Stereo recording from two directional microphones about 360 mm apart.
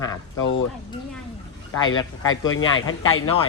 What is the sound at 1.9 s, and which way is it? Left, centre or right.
Speech, left.